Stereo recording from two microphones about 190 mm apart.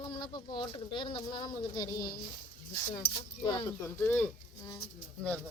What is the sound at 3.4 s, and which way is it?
Speech, 15° left (ahead or behind).